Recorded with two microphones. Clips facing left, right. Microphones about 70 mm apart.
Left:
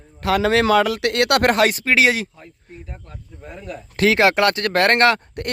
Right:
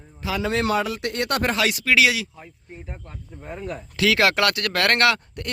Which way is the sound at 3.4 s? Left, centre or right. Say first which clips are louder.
Right 2 dB; right.